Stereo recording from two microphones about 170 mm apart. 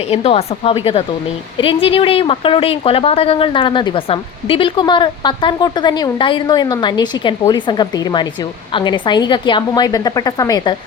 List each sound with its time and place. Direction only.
0.1 s a woman's voice: 35° left (ahead or behind)